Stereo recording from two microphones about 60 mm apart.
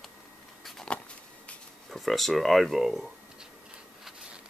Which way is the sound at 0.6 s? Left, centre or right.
Centre.